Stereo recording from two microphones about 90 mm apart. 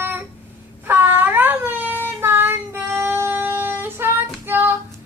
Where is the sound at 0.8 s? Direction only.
20° right (ahead or behind).